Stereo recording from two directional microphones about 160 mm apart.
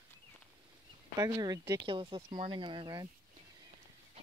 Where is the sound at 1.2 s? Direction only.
25° right (ahead or behind).